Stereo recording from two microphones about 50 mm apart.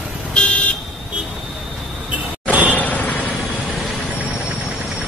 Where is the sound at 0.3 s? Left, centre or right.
Left.